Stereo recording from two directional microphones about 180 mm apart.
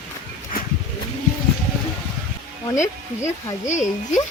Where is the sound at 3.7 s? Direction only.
40° left (ahead or behind).